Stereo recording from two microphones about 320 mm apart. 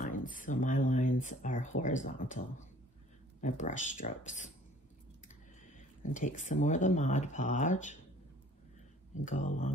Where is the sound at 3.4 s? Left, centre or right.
Left.